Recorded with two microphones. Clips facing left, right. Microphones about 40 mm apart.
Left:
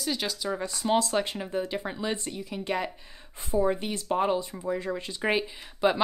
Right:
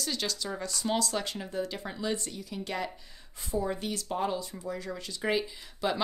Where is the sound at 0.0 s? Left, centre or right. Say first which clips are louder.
Left 3 dB; centre.